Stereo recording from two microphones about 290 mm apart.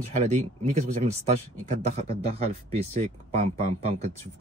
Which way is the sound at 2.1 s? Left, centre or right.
Right.